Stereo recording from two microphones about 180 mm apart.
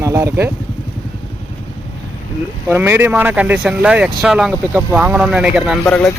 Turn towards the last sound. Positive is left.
turn(degrees=10)  # may be behind; listen again after turning